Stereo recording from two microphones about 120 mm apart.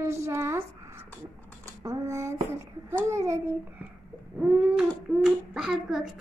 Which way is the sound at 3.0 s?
25° right (ahead or behind).